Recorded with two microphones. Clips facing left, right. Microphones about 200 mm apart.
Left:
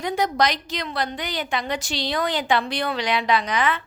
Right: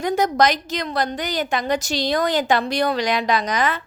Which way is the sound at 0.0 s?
45° right (ahead or behind).